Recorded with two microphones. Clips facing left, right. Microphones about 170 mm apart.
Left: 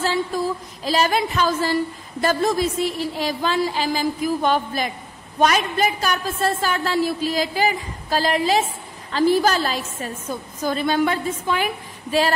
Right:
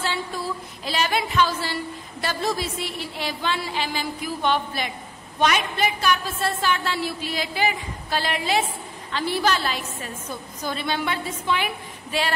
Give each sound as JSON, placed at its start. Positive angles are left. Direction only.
{"t": 0.8, "sound": "a woman's voice", "side_deg": 40}